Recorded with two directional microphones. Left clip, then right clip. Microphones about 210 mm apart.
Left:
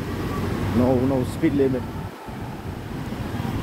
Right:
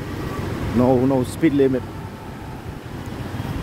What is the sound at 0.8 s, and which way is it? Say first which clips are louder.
Speech: right 5 dB; 40° right (ahead or behind).